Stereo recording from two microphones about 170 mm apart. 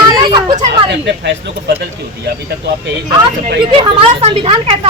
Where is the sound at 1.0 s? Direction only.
85° right.